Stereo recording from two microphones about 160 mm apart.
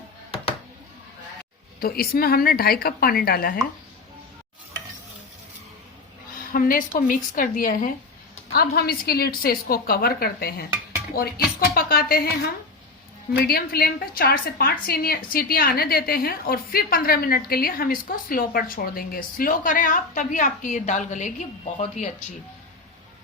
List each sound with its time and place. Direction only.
1.8 s a woman's voice: 70° left (ahead or behind)
6.5 s a woman's voice: 60° left (ahead or behind)
8.5 s a woman's voice: 75° left (ahead or behind)
11.7 s a woman's voice: 70° left (ahead or behind); by 22.1 s 50° left (ahead or behind)